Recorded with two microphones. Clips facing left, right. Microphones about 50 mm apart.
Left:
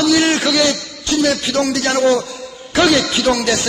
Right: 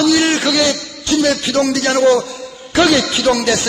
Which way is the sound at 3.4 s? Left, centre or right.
Centre.